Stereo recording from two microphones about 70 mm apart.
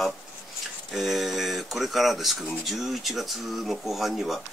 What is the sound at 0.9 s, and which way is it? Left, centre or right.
Speech, centre.